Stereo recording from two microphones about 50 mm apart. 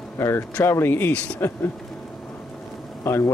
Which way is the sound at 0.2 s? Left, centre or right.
Left.